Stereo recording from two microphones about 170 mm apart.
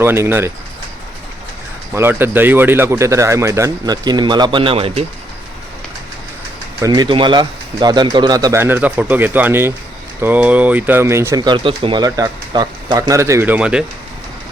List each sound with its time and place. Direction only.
0.0 s speech: 15° right (ahead or behind)
1.9 s speech: 15° right (ahead or behind); by 5.0 s 35° right (ahead or behind)
6.7 s speech: 20° right (ahead or behind); by 13.8 s 5° right (ahead or behind)